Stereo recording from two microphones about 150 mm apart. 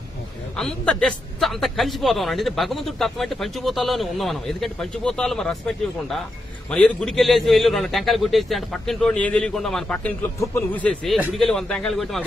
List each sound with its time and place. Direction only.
0.6 s a man's voice: 5° left (ahead or behind)
6.7 s a man's voice: 5° left (ahead or behind)